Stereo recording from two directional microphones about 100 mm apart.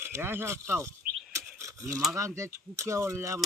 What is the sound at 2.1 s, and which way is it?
Speech, 30° right (ahead or behind).